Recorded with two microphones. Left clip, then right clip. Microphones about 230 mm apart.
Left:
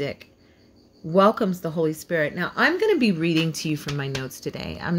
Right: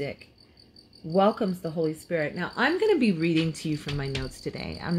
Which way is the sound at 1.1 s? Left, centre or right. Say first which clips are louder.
Left 5 dB; left.